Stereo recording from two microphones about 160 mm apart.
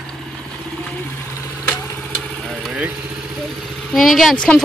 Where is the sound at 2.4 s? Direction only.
5° right (ahead or behind).